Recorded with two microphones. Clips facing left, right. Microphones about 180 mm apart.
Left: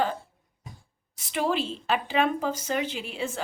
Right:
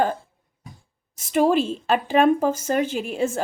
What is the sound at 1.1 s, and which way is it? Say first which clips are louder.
Speech: right 8 dB; 45° right (ahead or behind).